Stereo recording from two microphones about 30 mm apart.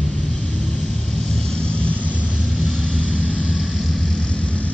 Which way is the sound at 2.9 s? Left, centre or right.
Left.